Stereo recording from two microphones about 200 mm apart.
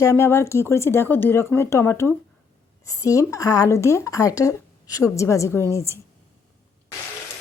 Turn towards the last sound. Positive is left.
turn(degrees=15)  # may be behind; listen again after turning